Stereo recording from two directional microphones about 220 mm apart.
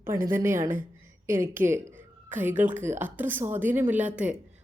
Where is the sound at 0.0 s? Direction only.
10° right (ahead or behind).